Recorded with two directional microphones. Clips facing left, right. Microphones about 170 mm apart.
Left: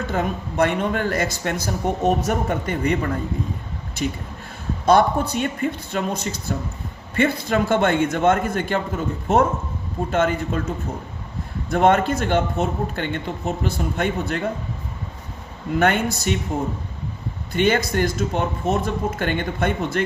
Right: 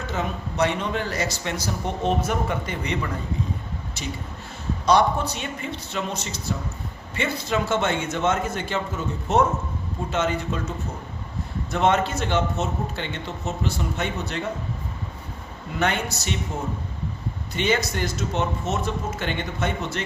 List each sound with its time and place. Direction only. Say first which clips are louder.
0.1 s speech: left 4 dB; 55° left (ahead or behind)
15.8 s speech: left 5 dB; 50° left (ahead or behind)
17.5 s speech: left 5 dB; 50° left (ahead or behind)